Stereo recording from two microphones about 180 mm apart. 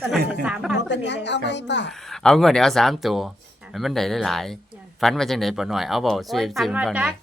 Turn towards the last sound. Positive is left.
turn(degrees=-5)  # may be behind; listen again after turning